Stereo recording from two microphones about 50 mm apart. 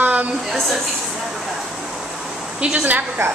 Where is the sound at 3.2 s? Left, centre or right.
Right.